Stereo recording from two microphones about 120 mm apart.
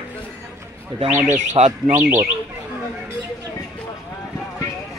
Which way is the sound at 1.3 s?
70° right (ahead or behind).